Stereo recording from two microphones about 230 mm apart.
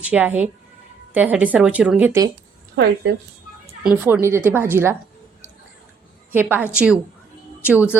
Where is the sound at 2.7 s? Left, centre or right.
Right.